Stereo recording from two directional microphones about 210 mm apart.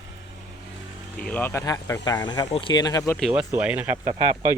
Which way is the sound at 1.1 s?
5° left (ahead or behind).